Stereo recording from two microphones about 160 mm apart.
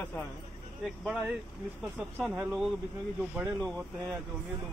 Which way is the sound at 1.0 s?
5° right (ahead or behind).